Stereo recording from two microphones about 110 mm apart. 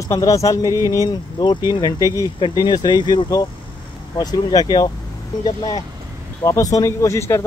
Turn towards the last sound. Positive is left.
turn(degrees=25)  # may be behind; listen again after turning